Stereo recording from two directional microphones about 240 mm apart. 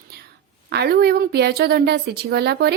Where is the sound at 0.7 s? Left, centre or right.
Right.